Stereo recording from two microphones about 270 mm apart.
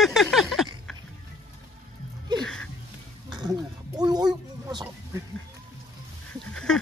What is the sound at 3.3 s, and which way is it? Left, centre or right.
Speech, centre.